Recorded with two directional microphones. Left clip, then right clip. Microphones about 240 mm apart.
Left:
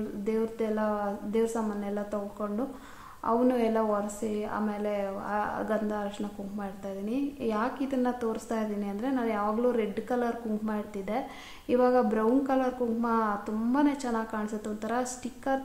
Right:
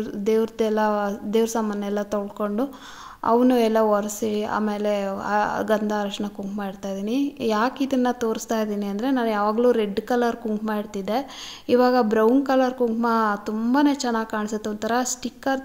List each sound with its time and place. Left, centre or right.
0.2 s a woman's voice: right